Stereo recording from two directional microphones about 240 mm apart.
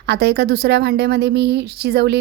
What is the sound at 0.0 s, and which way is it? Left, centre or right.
A woman's voice, right.